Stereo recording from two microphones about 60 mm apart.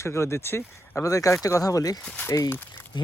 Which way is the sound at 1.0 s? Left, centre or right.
Left.